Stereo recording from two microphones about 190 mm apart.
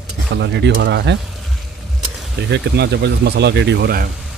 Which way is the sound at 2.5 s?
65° right (ahead or behind).